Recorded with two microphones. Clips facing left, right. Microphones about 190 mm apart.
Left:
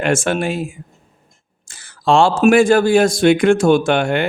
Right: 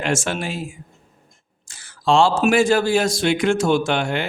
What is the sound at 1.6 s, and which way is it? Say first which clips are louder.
Speech: left 3 dB; 55° left (ahead or behind).